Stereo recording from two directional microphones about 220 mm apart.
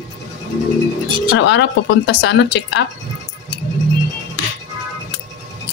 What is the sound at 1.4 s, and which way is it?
Speech, 55° left (ahead or behind).